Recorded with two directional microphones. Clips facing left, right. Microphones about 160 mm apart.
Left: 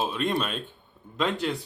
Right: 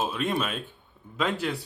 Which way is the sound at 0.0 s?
Centre (ahead or behind).